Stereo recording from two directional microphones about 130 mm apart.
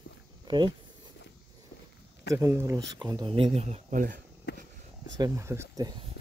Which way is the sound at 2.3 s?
20° right (ahead or behind).